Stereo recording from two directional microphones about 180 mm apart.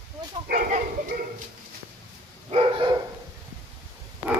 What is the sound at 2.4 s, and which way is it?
Dog, 30° right (ahead or behind).